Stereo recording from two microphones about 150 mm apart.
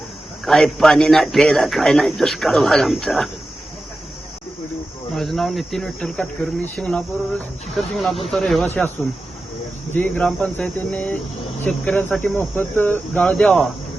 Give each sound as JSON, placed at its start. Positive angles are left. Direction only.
{"t": 0.4, "sound": "cricket", "side_deg": 0}
{"t": 5.1, "sound": "cricket", "side_deg": 0}